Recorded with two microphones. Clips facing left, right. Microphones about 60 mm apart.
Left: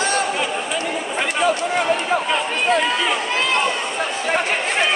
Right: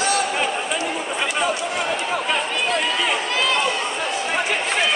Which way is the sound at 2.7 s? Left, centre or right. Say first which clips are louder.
Left 3 dB; left.